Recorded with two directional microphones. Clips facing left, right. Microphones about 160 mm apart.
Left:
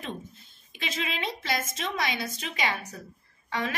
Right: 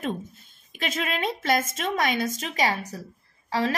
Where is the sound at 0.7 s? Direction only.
50° right (ahead or behind).